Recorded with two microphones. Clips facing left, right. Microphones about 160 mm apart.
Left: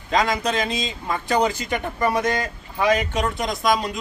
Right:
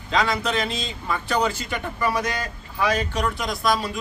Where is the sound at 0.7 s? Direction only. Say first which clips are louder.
Left 2 dB; 15° left (ahead or behind).